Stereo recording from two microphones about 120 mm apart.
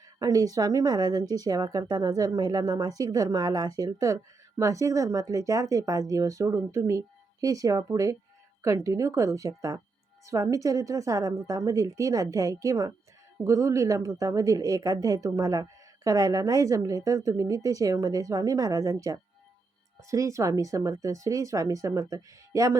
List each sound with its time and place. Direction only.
0.2 s a woman's voice: 30° right (ahead or behind)